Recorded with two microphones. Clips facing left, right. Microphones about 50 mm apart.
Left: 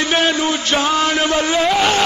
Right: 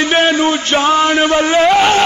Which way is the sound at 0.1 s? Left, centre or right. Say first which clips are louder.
Right 4 dB; right.